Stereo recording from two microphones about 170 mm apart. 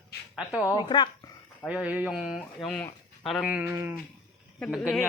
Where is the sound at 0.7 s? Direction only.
25° left (ahead or behind).